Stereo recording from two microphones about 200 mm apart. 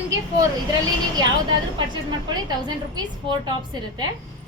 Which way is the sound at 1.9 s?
20° right (ahead or behind).